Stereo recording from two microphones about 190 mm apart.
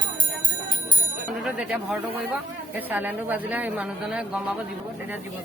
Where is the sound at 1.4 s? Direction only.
5° right (ahead or behind).